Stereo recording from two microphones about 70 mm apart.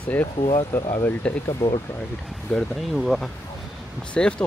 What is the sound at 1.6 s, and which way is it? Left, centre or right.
Speech, left.